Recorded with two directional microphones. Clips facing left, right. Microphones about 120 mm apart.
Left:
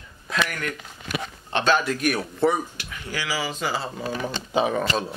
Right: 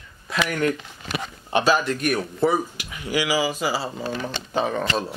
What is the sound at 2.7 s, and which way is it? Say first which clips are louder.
Speech: right 7 dB; 15° right (ahead or behind).